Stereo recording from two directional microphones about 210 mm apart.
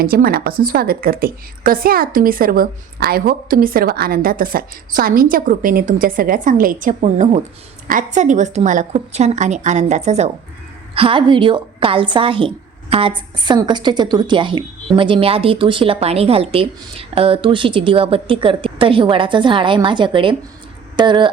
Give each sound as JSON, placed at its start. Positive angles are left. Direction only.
{"t": 0.0, "sound": "a woman's voice", "side_deg": -45}